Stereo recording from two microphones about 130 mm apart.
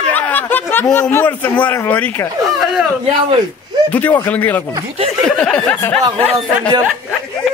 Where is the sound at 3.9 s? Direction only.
10° left (ahead or behind).